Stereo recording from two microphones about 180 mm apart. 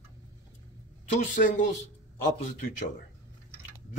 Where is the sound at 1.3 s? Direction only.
50° left (ahead or behind).